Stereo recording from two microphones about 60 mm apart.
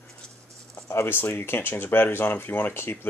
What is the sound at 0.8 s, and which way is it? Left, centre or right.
Speech, left.